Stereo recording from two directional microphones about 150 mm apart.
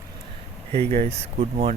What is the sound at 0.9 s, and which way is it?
Speech, 45° right (ahead or behind).